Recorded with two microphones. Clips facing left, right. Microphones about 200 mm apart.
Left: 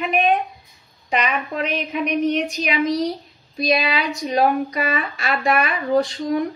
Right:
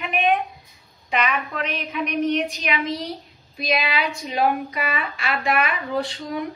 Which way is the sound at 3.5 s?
40° left (ahead or behind).